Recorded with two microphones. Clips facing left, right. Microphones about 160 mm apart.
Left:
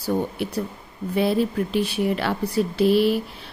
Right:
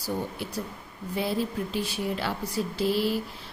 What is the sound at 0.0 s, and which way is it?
A woman's voice, 60° left (ahead or behind).